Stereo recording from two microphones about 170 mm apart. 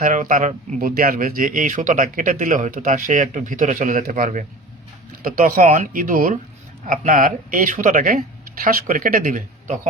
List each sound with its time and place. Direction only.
0.0 s speech: 50° right (ahead or behind)